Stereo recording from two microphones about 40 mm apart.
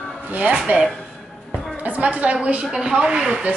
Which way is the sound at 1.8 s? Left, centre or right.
Right.